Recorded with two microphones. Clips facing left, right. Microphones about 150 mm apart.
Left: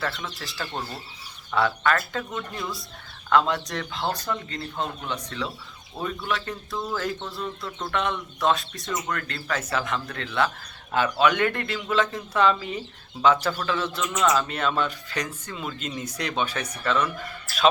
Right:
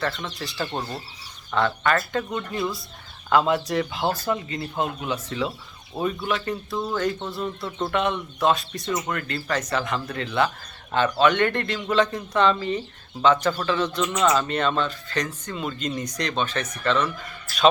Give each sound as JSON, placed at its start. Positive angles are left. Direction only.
{"t": 0.0, "sound": "speech", "side_deg": 0}
{"t": 0.6, "sound": "speech", "side_deg": -15}
{"t": 1.5, "sound": "speech", "side_deg": 0}
{"t": 7.4, "sound": "speech", "side_deg": -10}